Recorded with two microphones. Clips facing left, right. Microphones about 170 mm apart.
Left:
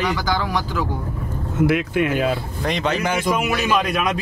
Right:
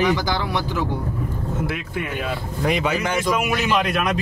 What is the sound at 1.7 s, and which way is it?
Speech, 90° left.